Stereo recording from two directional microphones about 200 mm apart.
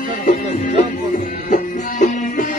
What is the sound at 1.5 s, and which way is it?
Music, 40° left (ahead or behind).